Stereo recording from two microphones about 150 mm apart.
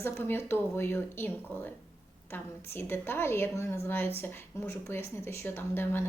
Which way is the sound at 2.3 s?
15° left (ahead or behind).